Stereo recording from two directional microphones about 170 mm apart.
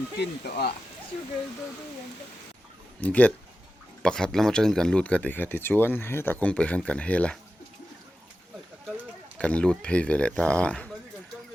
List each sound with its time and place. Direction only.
0.2 s speech: 70° left (ahead or behind)
3.0 s speech: 10° left (ahead or behind)
9.4 s speech: 5° left (ahead or behind)